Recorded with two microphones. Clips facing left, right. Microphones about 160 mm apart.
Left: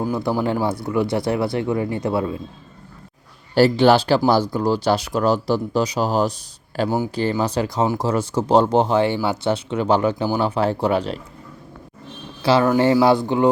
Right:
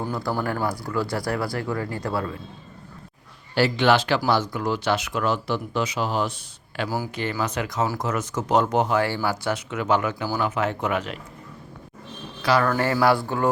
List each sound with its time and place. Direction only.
0.1 s speech: 20° left (ahead or behind)
3.5 s speech: 40° left (ahead or behind)
6.8 s speech: 25° left (ahead or behind)
12.4 s speech: 25° left (ahead or behind)